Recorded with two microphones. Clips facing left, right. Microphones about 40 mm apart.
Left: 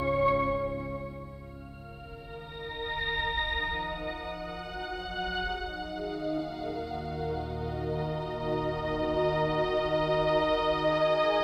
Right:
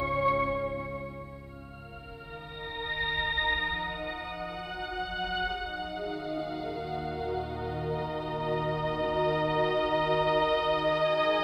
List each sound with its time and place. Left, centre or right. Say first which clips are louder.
0.0 s music: left 1 dB; centre
0.5 s music: left 1 dB; right
2.7 s music: right 1 dB; centre